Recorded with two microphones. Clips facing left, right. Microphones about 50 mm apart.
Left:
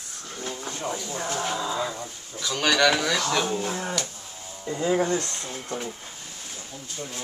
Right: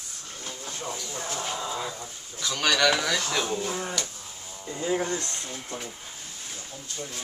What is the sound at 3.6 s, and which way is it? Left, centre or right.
Speech, left.